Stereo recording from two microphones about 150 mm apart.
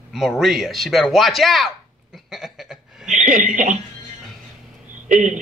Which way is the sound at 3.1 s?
55° right (ahead or behind).